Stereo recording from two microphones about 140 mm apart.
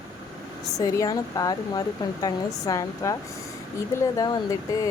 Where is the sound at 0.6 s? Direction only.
25° left (ahead or behind).